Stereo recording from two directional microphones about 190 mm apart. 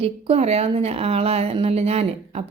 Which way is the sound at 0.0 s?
30° right (ahead or behind).